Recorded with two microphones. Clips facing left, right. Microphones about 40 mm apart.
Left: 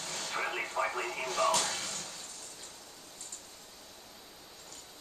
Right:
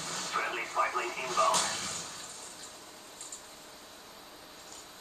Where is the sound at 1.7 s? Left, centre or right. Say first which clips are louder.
Right 1 dB; right.